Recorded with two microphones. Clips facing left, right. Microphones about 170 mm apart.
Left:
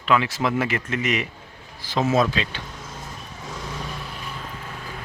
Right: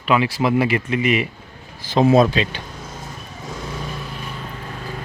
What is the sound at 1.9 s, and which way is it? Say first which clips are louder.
Speech: right 6 dB; 20° right (ahead or behind).